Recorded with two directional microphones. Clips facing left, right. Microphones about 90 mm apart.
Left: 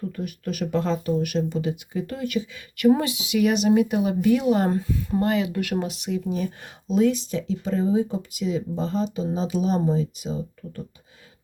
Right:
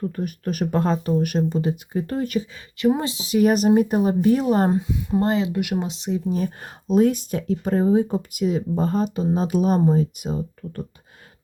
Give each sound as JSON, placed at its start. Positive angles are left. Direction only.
{"t": 0.2, "sound": "speech", "side_deg": -40}
{"t": 4.7, "sound": "speech", "side_deg": -20}
{"t": 5.2, "sound": "speech", "side_deg": -30}
{"t": 5.5, "sound": "speech", "side_deg": -15}
{"t": 6.3, "sound": "speech", "side_deg": -45}